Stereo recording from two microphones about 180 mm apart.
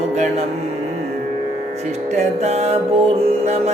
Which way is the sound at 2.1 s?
40° right (ahead or behind).